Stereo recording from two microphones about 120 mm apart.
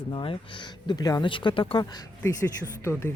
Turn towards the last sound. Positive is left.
turn(degrees=20)  # may be behind; listen again after turning